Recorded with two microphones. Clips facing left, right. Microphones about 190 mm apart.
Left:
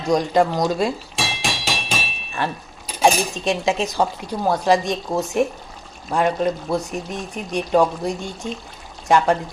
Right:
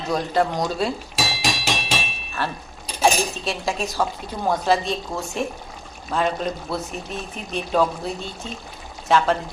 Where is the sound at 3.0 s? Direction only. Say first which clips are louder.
Left 2 dB; 20° left (ahead or behind).